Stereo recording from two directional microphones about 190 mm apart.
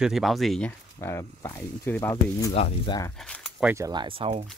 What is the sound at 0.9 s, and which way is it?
Speech, 15° left (ahead or behind).